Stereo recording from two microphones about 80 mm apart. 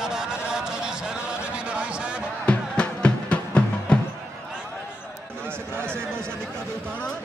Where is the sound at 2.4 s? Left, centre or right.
Centre.